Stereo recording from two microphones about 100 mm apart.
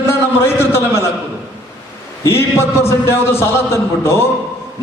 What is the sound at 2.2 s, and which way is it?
A man's voice, 25° left (ahead or behind).